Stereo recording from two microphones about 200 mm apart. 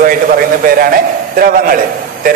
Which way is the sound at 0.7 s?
45° right (ahead or behind).